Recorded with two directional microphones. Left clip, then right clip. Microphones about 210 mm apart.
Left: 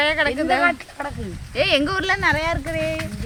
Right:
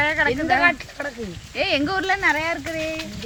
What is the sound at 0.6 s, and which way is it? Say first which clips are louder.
Speech: right 1 dB; 15° right (ahead or behind).